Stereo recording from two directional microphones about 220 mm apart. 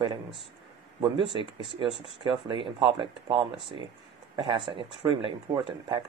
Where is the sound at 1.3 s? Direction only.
20° right (ahead or behind).